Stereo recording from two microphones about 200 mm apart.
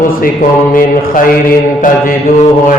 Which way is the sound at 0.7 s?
45° left (ahead or behind).